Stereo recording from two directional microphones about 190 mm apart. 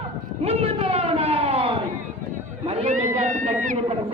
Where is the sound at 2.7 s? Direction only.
35° right (ahead or behind).